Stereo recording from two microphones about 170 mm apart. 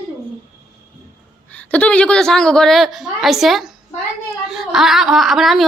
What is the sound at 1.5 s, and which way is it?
A woman's voice, 5° left (ahead or behind).